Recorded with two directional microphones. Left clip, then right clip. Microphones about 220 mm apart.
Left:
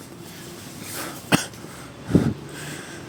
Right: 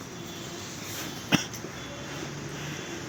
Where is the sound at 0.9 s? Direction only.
35° left (ahead or behind).